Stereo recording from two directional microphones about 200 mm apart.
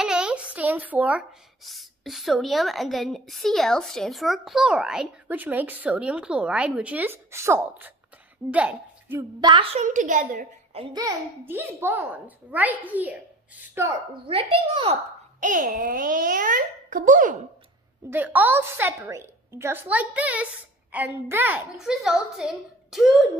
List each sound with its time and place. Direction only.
0.0 s a woman's voice: 5° right (ahead or behind)
9.4 s a woman's voice: 25° right (ahead or behind); by 10.8 s 40° right (ahead or behind)
10.8 s a woman's voice: 20° right (ahead or behind)
14.2 s a child's voice: 30° right (ahead or behind)
15.4 s a child's voice: 40° right (ahead or behind)
18.1 s a woman's voice: 10° right (ahead or behind)